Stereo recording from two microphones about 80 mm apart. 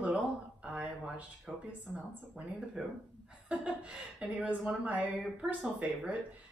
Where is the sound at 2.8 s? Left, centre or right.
Centre.